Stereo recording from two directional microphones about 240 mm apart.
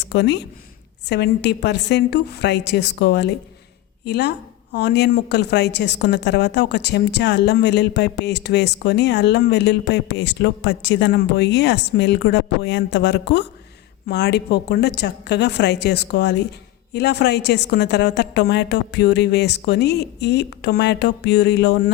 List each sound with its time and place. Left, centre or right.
0.0 s a woman's voice: left